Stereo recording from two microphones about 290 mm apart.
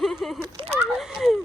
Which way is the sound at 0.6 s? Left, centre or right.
Centre.